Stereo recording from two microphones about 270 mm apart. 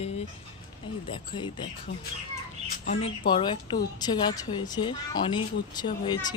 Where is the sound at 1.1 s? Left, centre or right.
Centre.